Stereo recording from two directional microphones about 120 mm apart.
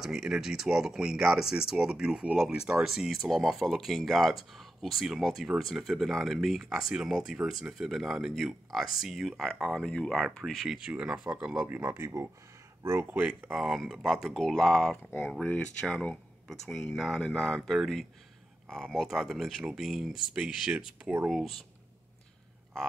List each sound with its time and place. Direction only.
0.0 s speech: 5° right (ahead or behind)
13.6 s speech: 5° right (ahead or behind)